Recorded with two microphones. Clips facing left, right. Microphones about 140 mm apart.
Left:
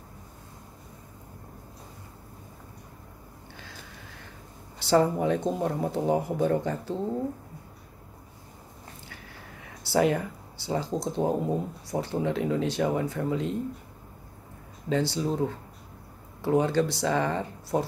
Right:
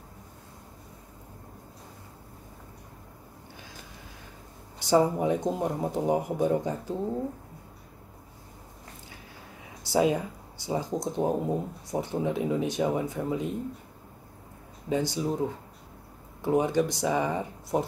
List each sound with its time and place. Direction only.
4.7 s speech: 15° right (ahead or behind)
9.8 s speech: 15° right (ahead or behind)
14.9 s speech: 15° right (ahead or behind)